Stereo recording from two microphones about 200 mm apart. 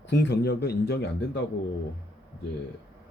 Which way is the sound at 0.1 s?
60° left (ahead or behind).